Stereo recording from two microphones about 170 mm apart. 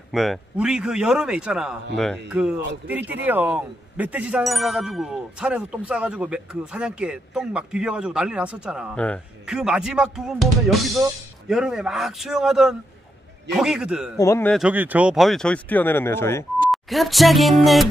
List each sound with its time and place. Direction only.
0.1 s speech: centre (ahead or behind)
8.9 s a man's voice: 5° left (ahead or behind)
9.5 s speech: 5° right (ahead or behind)
14.1 s a man's voice: 15° left (ahead or behind)
14.5 s speech: 5° right (ahead or behind); by 16.4 s 15° left (ahead or behind)
16.7 s speech: centre (ahead or behind)